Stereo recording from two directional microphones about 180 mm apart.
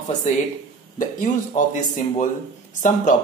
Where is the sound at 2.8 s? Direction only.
45° left (ahead or behind).